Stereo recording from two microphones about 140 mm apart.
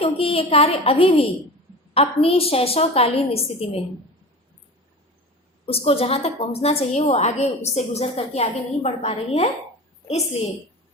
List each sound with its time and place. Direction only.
0.0 s a woman's voice: 40° left (ahead or behind)
5.6 s a woman's voice: 45° left (ahead or behind)